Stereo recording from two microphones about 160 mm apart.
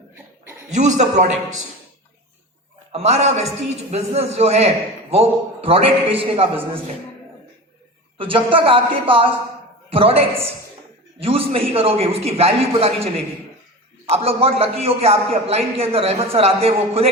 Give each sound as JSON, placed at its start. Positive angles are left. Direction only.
{"t": 0.7, "sound": "a man's voice", "side_deg": -50}
{"t": 2.9, "sound": "a man's voice", "side_deg": -45}
{"t": 8.2, "sound": "a man's voice", "side_deg": -35}
{"t": 14.1, "sound": "a man's voice", "side_deg": -35}